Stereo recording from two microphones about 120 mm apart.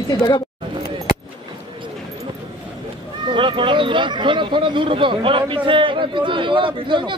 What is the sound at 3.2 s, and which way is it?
Speech, 45° right (ahead or behind).